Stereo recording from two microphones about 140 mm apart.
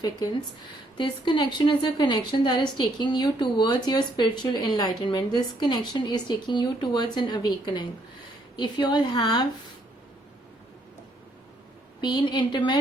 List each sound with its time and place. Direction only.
0.9 s a woman's voice: 35° left (ahead or behind)
11.9 s a woman's voice: 30° left (ahead or behind)